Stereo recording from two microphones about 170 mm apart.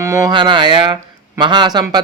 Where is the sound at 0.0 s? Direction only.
20° right (ahead or behind).